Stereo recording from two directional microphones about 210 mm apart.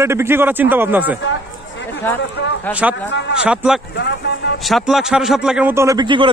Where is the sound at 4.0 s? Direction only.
55° left (ahead or behind).